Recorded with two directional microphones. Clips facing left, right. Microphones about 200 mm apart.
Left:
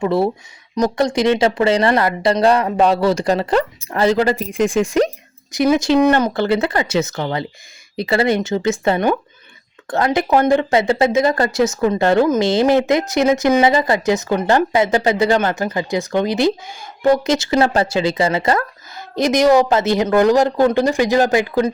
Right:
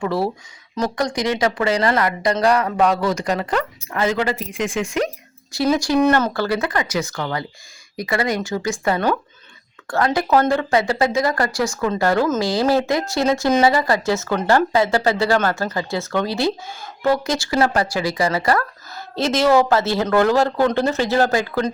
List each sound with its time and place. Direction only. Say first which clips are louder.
0.0 s speech: left 4 dB; 25° left (ahead or behind)
5.5 s speech: left 4 dB; 20° left (ahead or behind)